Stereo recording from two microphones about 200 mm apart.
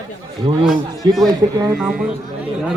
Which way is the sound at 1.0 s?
20° right (ahead or behind).